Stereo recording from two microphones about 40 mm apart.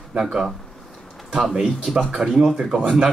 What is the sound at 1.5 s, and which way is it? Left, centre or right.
Speech, centre.